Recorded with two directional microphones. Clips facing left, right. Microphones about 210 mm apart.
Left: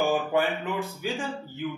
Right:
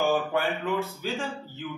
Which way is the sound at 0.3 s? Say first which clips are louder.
Left 1 dB; 15° left (ahead or behind).